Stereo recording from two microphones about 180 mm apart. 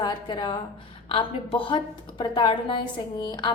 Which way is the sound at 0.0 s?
25° left (ahead or behind).